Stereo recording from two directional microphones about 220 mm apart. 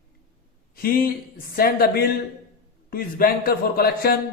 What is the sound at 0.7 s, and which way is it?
A man's voice, 40° left (ahead or behind).